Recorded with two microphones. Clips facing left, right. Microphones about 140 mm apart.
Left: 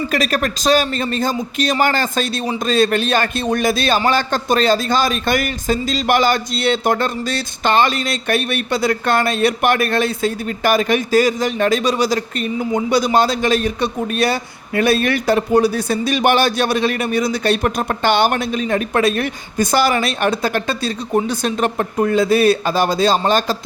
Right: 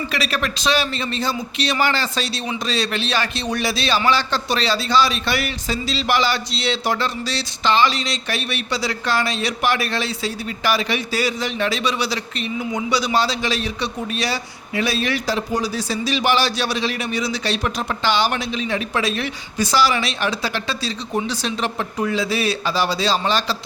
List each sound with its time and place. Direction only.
0.1 s a man's voice: 45° left (ahead or behind)